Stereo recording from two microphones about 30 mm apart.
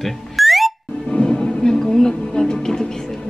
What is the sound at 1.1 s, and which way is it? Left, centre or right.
Music, left.